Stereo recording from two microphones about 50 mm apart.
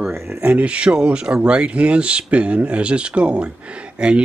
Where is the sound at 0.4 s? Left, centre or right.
Right.